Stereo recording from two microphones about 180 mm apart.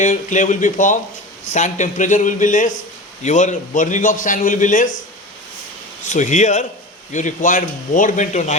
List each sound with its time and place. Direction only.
0.0 s a man's voice: 45° left (ahead or behind)
6.1 s a man's voice: 40° left (ahead or behind)